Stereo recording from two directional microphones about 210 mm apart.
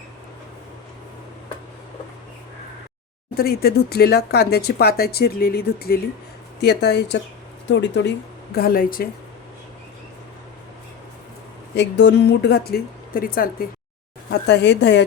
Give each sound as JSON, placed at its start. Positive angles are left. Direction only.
{"t": 3.3, "sound": "a woman's voice", "side_deg": 45}
{"t": 8.5, "sound": "speech", "side_deg": 45}
{"t": 11.7, "sound": "speech", "side_deg": 55}
{"t": 14.3, "sound": "a woman's voice", "side_deg": 55}